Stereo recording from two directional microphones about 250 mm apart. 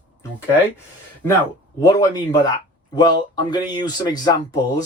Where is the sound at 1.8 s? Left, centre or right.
Centre.